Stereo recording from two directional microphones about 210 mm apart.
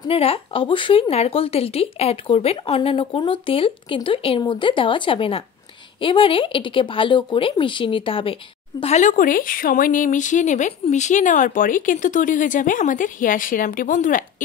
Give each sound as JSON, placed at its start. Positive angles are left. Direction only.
{"t": 0.1, "sound": "speech", "side_deg": 25}